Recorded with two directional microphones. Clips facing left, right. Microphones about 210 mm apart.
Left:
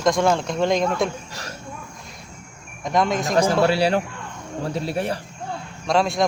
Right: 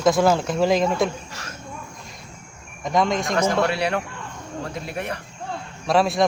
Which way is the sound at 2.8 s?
Centre (ahead or behind).